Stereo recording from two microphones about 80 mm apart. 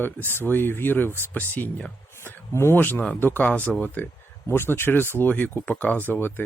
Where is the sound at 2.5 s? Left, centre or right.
Left.